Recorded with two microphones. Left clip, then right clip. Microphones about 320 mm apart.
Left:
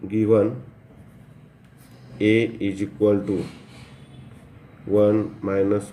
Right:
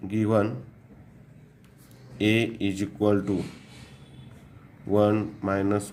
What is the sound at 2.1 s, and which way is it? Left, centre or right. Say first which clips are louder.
Speech: left 5 dB; right.